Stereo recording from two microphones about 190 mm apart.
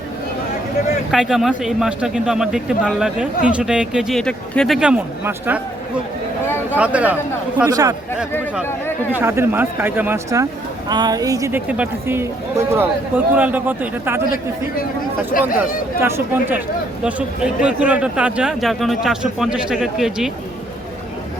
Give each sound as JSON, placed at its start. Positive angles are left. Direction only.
{"t": 1.1, "sound": "speech", "side_deg": 0}
{"t": 6.7, "sound": "speech", "side_deg": -5}
{"t": 7.7, "sound": "speech", "side_deg": -20}
{"t": 9.1, "sound": "speech", "side_deg": -10}
{"t": 15.3, "sound": "speech", "side_deg": 45}
{"t": 16.0, "sound": "speech", "side_deg": -10}